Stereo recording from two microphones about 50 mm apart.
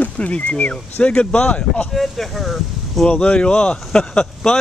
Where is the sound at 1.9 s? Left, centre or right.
Centre.